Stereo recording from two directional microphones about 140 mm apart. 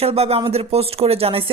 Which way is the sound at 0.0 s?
45° right (ahead or behind).